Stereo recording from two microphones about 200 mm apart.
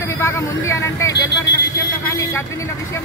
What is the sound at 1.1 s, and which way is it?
Speech, 65° left (ahead or behind).